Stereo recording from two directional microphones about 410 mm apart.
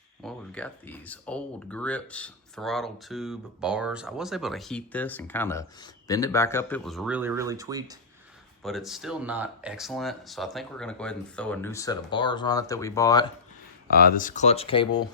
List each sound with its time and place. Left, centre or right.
0.2 s speech: centre
13.9 s speech: left